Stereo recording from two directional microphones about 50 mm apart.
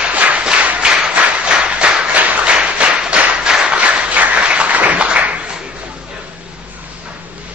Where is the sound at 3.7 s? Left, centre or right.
Right.